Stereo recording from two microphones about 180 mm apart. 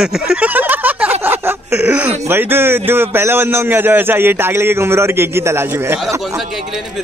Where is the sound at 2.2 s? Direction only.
10° right (ahead or behind).